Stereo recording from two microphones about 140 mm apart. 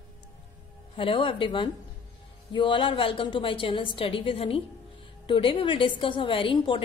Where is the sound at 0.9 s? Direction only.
40° left (ahead or behind).